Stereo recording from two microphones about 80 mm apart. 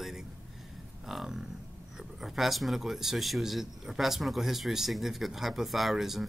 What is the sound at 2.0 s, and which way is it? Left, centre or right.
A man's voice, centre.